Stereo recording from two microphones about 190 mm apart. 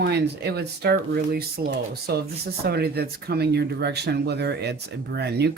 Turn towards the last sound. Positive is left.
turn(degrees=-60)  # may be behind; listen again after turning